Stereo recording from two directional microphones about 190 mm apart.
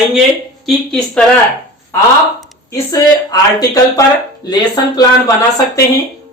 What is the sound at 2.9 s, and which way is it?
Speech, 20° left (ahead or behind).